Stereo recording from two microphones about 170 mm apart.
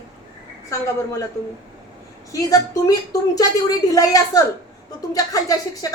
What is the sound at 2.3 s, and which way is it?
Speech, 20° left (ahead or behind).